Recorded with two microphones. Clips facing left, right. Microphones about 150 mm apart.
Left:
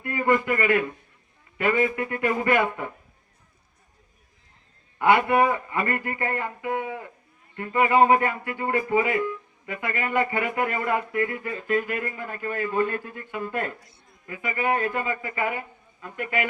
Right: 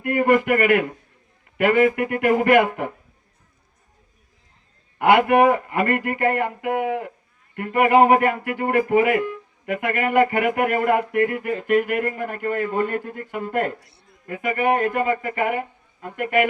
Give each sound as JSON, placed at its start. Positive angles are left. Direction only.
{"t": 0.0, "sound": "speech", "side_deg": -65}
{"t": 4.9, "sound": "speech", "side_deg": -55}
{"t": 13.7, "sound": "a man's voice", "side_deg": -70}